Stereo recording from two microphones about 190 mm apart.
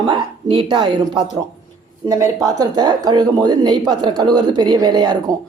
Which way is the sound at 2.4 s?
20° right (ahead or behind).